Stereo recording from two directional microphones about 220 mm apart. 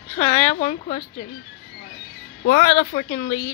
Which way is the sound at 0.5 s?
35° left (ahead or behind).